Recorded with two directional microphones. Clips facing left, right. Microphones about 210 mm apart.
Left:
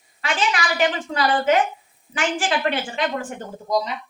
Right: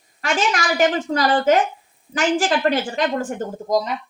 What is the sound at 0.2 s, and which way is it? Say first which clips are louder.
A woman's voice: right 3 dB; 45° right (ahead or behind).